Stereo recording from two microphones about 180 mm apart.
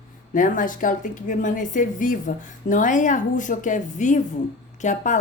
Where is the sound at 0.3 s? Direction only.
45° left (ahead or behind).